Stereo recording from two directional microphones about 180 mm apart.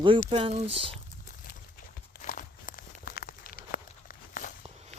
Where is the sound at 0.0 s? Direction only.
30° right (ahead or behind).